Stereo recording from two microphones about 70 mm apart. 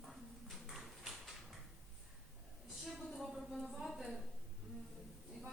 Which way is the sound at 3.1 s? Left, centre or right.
Centre.